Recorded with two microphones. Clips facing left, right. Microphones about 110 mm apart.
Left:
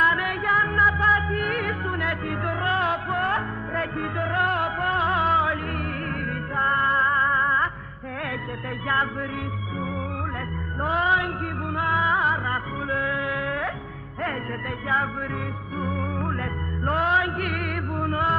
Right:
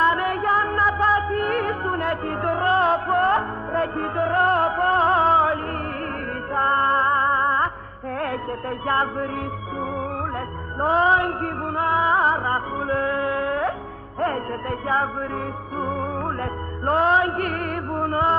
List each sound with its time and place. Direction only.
0.0 s music: 30° right (ahead or behind)
10.8 s music: 35° right (ahead or behind)
15.8 s music: 35° right (ahead or behind)